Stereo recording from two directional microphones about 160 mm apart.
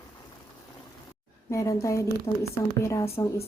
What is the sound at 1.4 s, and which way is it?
Speech, 20° left (ahead or behind).